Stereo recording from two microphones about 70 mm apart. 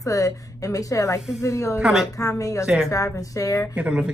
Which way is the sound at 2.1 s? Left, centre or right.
Left.